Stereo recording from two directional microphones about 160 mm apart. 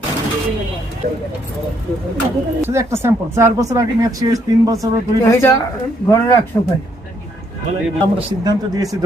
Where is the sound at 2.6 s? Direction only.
15° right (ahead or behind).